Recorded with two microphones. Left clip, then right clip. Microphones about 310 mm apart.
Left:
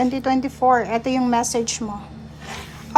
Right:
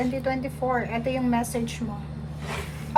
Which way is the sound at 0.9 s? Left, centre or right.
Centre.